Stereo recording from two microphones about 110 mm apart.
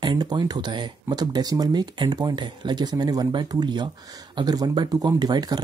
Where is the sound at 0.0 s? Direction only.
40° right (ahead or behind).